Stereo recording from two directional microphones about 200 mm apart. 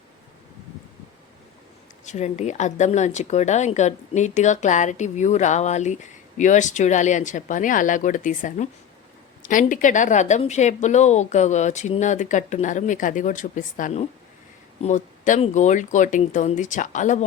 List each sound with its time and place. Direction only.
2.0 s speech: 35° left (ahead or behind)